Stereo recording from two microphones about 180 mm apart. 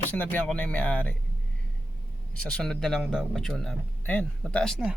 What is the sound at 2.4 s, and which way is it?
A man's voice, 5° left (ahead or behind).